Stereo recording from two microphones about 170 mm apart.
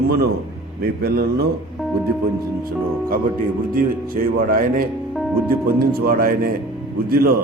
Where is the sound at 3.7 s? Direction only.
55° right (ahead or behind).